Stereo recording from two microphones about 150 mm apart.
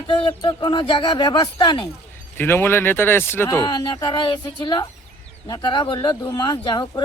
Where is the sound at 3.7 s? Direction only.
30° left (ahead or behind).